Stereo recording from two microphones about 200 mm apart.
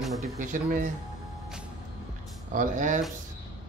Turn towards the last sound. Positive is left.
turn(degrees=-40)  # may be behind; listen again after turning